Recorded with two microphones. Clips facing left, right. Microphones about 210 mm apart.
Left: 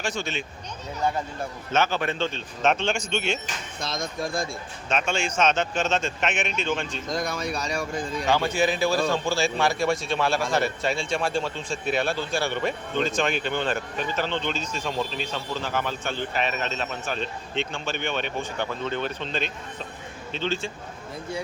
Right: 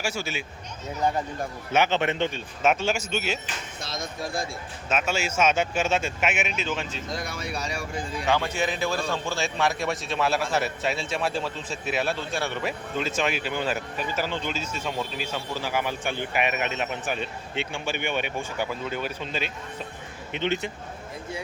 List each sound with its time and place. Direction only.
0.0 s speech: 10° right (ahead or behind)
1.7 s speech: 20° right (ahead or behind)
4.9 s speech: 5° right (ahead or behind)
7.2 s speech: 40° left (ahead or behind)
8.5 s a man's voice: 5° left (ahead or behind)
8.9 s speech: 35° left (ahead or behind)
9.4 s a man's voice: centre (ahead or behind)
20.3 s speech: 20° right (ahead or behind)